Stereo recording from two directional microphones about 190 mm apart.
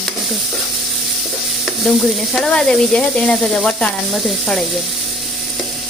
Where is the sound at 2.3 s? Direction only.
5° left (ahead or behind).